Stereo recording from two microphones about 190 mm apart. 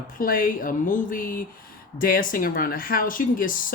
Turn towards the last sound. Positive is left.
turn(degrees=45)  # may be behind; listen again after turning